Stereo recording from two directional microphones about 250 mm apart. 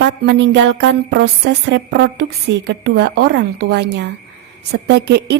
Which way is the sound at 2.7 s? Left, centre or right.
Right.